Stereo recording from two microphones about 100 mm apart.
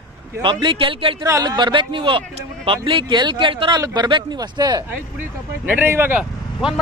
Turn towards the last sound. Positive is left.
turn(degrees=-5)  # may be behind; listen again after turning